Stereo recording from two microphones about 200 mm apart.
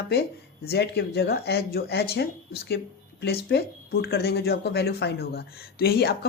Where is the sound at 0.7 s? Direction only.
55° left (ahead or behind).